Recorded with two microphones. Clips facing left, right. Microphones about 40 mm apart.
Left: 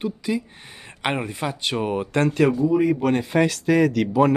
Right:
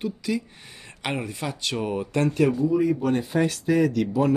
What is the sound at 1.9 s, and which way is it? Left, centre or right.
Speech, left.